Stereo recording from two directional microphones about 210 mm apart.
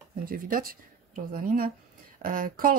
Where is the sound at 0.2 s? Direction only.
40° right (ahead or behind).